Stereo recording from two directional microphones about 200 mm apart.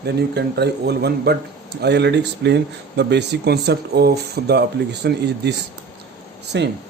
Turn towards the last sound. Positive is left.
turn(degrees=-60)  # may be behind; listen again after turning